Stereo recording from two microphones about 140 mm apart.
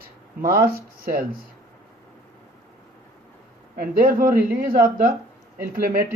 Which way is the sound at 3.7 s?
90° right.